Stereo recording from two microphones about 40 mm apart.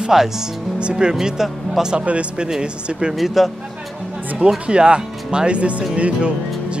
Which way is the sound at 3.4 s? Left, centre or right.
Centre.